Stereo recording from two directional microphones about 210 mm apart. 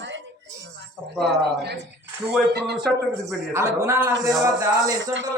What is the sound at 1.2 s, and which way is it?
Speech, 50° right (ahead or behind).